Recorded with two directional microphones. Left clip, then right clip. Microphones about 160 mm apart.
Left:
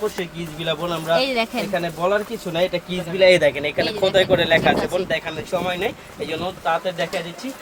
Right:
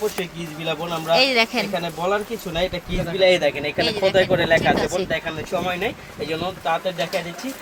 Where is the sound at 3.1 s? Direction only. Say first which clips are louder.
Left 3 dB; 35° left (ahead or behind).